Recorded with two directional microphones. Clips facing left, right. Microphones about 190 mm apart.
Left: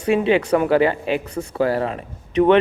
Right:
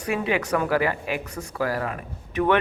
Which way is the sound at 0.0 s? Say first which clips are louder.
Left 8 dB; 25° left (ahead or behind).